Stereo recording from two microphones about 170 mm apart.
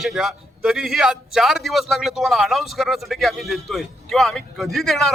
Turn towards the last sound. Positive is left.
turn(degrees=0)  # may be behind; listen again after turning